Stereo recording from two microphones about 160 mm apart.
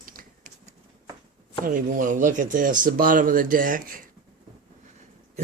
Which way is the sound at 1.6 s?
55° right (ahead or behind).